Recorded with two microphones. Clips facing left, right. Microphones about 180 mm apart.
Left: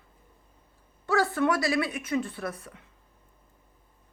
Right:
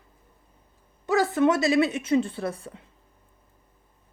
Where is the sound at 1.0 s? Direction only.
20° right (ahead or behind).